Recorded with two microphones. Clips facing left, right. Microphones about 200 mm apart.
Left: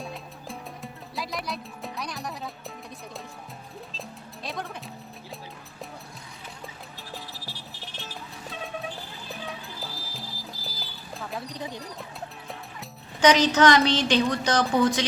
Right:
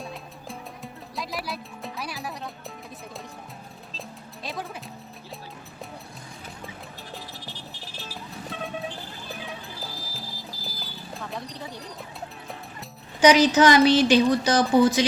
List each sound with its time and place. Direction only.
0.0 s music: centre (ahead or behind)
4.4 s music: 5° right (ahead or behind)
7.1 s music: centre (ahead or behind)
9.8 s horse: centre (ahead or behind)
11.5 s bird: 15° left (ahead or behind)
13.2 s a woman's voice: 10° right (ahead or behind)